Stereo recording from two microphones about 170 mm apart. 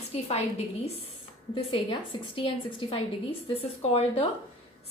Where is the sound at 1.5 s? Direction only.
30° left (ahead or behind).